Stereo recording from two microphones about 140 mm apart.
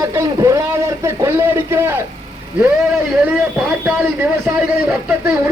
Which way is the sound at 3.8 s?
10° right (ahead or behind).